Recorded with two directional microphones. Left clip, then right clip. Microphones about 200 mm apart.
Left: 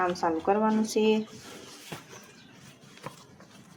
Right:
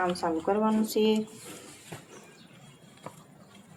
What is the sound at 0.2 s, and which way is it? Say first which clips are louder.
Speech: left 2 dB; 15° left (ahead or behind).